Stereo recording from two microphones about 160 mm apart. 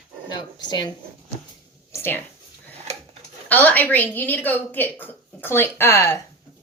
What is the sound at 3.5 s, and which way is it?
A woman's voice, 10° left (ahead or behind).